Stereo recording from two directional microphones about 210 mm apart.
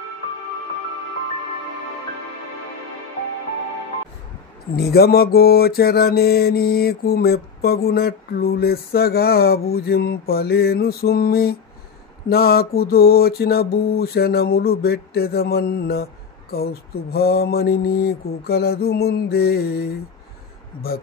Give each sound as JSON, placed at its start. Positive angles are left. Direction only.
{"t": 4.7, "sound": "mantra", "side_deg": 50}